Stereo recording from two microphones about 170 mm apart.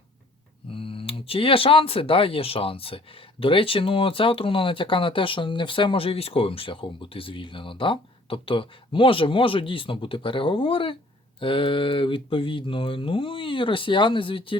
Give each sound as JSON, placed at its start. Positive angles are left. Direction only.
{"t": 0.7, "sound": "speech", "side_deg": 30}